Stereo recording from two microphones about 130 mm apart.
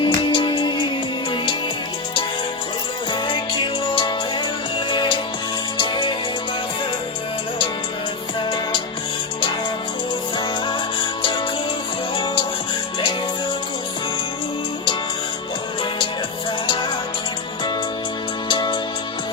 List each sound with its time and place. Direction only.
0.0 s music: 40° left (ahead or behind)
3.1 s music: 35° left (ahead or behind)
11.2 s music: 40° left (ahead or behind)
18.4 s music: 35° left (ahead or behind)